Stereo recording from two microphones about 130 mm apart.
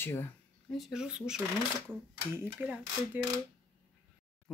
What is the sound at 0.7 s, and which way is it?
Speech, centre (ahead or behind).